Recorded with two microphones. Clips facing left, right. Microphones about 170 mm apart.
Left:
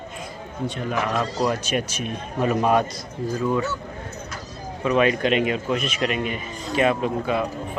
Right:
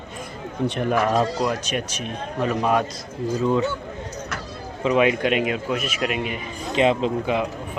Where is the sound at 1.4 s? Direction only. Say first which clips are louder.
Left 1 dB; centre (ahead or behind).